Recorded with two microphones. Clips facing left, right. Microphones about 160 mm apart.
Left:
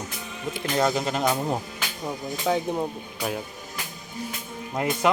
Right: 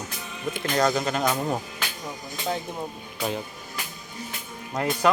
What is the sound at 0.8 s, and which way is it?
Speech, 25° left (ahead or behind).